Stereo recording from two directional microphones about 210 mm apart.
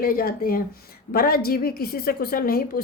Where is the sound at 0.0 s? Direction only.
45° left (ahead or behind).